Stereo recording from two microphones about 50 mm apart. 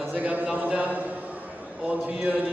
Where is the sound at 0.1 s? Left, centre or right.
Right.